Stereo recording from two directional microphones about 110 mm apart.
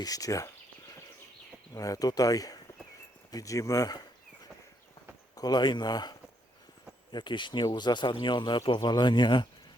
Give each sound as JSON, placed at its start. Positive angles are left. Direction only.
{"t": 0.0, "sound": "speech", "side_deg": 35}
{"t": 1.7, "sound": "speech", "side_deg": 35}
{"t": 5.4, "sound": "speech", "side_deg": 40}